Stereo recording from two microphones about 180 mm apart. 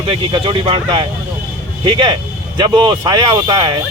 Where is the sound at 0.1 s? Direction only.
30° right (ahead or behind).